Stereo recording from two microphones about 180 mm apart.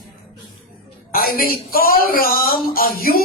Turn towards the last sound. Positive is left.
turn(degrees=55)  # may be behind; listen again after turning